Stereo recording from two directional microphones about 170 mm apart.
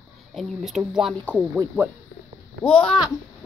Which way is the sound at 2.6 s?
5° left (ahead or behind).